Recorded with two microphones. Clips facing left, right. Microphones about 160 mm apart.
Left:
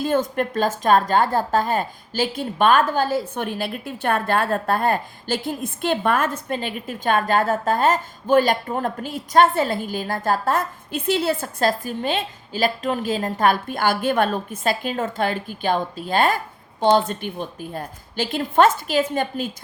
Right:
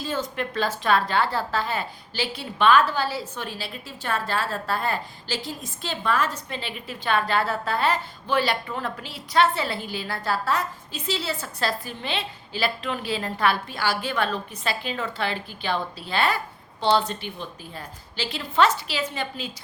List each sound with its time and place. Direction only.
0.0 s a woman's voice: 50° left (ahead or behind)